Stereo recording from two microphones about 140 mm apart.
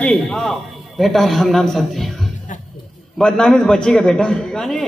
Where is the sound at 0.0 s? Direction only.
5° left (ahead or behind).